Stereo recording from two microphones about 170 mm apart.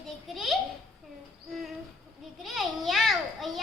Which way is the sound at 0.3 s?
Centre (ahead or behind).